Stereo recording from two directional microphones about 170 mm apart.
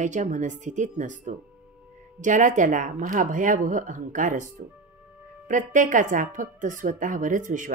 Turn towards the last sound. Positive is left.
turn(degrees=-50)  # may be behind; listen again after turning